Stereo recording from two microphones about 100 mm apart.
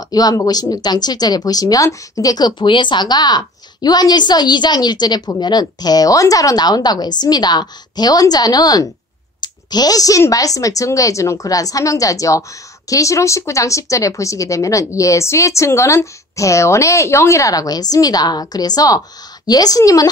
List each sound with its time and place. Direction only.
0.1 s speech: 40° left (ahead or behind)